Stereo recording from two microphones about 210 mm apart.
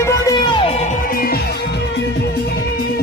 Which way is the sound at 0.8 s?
45° left (ahead or behind).